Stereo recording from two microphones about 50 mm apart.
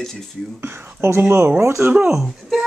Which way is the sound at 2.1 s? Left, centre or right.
Centre.